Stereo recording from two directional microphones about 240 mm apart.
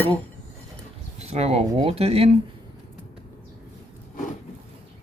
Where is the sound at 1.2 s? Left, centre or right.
Right.